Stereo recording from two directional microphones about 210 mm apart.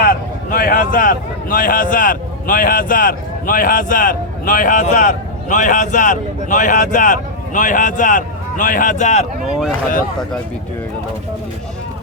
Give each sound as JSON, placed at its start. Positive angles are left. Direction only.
{"t": 0.0, "sound": "speech", "side_deg": 45}
{"t": 9.5, "sound": "speech", "side_deg": 0}